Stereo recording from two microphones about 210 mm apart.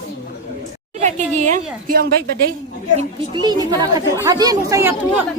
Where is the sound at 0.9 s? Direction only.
35° right (ahead or behind).